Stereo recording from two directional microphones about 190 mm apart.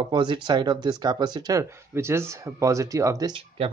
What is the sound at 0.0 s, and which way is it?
Speech, 25° right (ahead or behind).